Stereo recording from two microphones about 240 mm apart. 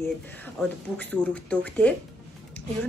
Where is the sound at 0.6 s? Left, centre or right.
Centre.